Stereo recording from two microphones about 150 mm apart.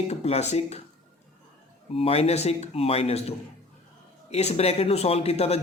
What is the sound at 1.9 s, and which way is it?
Speech, 40° left (ahead or behind).